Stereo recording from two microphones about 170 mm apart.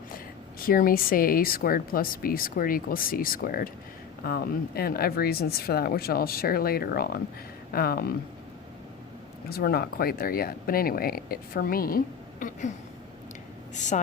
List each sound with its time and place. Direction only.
0.6 s speech: 55° left (ahead or behind)
9.5 s speech: 65° left (ahead or behind)
13.7 s speech: 45° left (ahead or behind)